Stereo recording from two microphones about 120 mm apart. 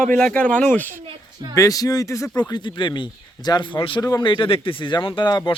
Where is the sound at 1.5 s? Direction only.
30° left (ahead or behind).